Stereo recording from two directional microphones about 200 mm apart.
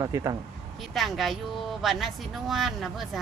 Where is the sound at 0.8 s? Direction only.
Centre (ahead or behind).